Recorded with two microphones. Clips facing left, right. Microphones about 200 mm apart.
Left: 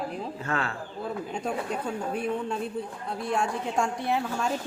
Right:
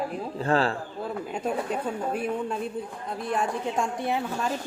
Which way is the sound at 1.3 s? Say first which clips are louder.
Right 4 dB; 5° right (ahead or behind).